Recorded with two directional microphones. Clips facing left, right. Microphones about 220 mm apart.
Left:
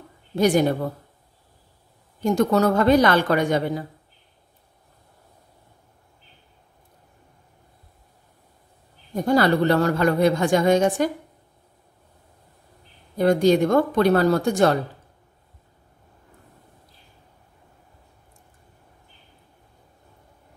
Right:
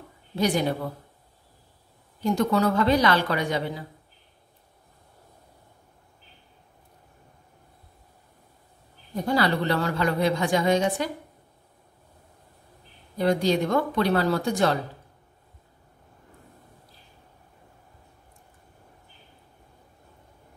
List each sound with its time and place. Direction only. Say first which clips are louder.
0.4 s a woman's voice: left 6 dB; 50° left (ahead or behind)
2.2 s a woman's voice: left 4 dB; 45° left (ahead or behind)
9.1 s a woman's voice: left 5 dB; 45° left (ahead or behind)
13.2 s a woman's voice: left 5 dB; 50° left (ahead or behind)